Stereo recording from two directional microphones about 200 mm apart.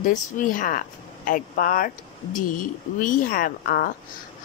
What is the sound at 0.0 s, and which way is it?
Speech, 40° left (ahead or behind).